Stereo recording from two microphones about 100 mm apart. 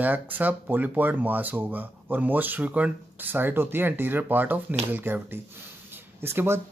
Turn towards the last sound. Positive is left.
turn(degrees=-25)  # may be behind; listen again after turning